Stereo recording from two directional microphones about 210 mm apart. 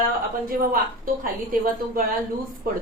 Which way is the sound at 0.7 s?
40° right (ahead or behind).